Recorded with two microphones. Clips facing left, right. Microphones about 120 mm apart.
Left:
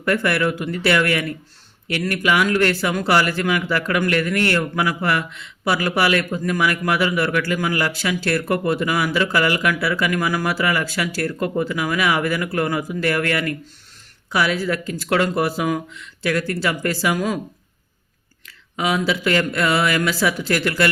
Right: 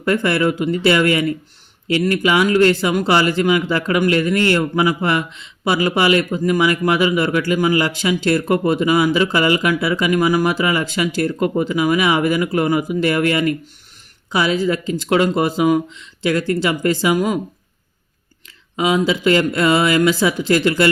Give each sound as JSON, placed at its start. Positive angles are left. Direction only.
{"t": 0.0, "sound": "speech", "side_deg": -25}
{"t": 18.8, "sound": "speech", "side_deg": -25}